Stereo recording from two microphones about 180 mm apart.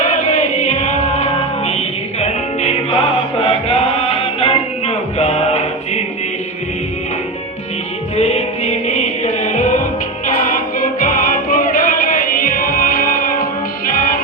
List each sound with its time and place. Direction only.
0.0 s music: 40° left (ahead or behind)
8.1 s music: 35° left (ahead or behind)